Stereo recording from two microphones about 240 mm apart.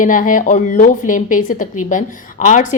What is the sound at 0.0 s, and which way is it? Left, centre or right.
A woman's voice, left.